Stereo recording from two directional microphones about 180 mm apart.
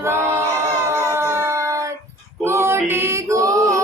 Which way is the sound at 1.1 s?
15° right (ahead or behind).